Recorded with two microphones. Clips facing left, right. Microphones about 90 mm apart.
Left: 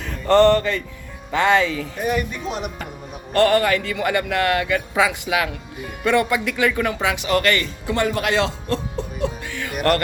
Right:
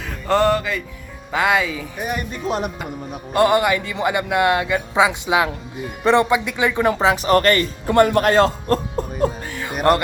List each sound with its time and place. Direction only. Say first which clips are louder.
0.0 s music: left 3 dB; centre (ahead or behind)
1.3 s speech: left 1 dB; 5° right (ahead or behind)
2.3 s speech: right 4 dB; 40° right (ahead or behind)
3.3 s speech: even; 15° right (ahead or behind)
6.8 s speech: right 5 dB; 35° right (ahead or behind)
9.8 s speech: right 3 dB; 15° right (ahead or behind)